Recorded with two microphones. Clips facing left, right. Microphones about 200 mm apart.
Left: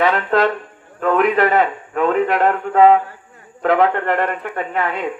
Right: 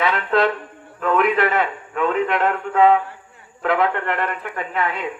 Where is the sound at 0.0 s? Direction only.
40° left (ahead or behind).